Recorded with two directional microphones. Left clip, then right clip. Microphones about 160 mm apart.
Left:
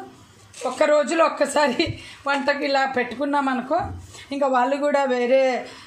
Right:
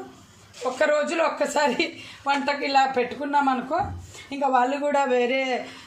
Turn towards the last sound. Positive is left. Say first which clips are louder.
# left 4 dB
turn(degrees=15)  # may be behind; listen again after turning